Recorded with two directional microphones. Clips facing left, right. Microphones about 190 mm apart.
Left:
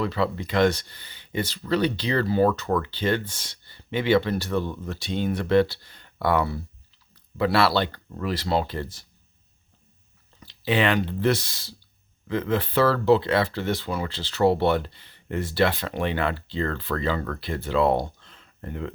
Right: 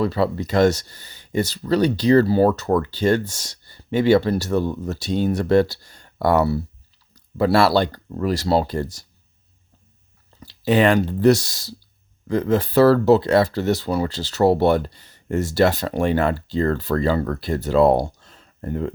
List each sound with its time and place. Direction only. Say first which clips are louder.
0.0 s speech: right 5 dB; 40° right (ahead or behind)
10.4 s speech: right 6 dB; 45° right (ahead or behind)